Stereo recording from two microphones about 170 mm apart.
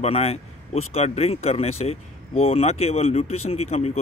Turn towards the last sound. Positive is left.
turn(degrees=40)  # may be behind; listen again after turning